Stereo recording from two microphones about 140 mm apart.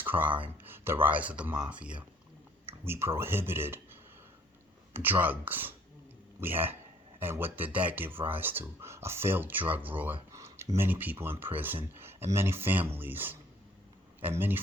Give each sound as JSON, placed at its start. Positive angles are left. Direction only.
{"t": 0.0, "sound": "a sound", "side_deg": -15}
{"t": 1.0, "sound": "speech", "side_deg": -10}
{"t": 4.9, "sound": "speech", "side_deg": -15}